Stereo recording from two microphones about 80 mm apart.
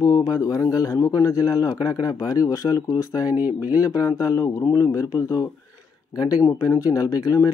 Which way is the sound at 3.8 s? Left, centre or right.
Left.